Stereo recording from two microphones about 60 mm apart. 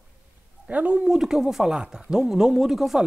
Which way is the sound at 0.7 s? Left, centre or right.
Right.